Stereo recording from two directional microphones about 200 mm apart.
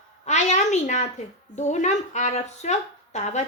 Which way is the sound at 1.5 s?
35° left (ahead or behind).